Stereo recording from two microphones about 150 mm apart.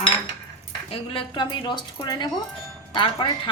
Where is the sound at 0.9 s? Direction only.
35° left (ahead or behind).